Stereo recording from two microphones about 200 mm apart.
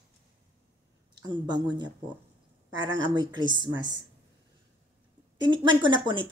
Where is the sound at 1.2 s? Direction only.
20° right (ahead or behind).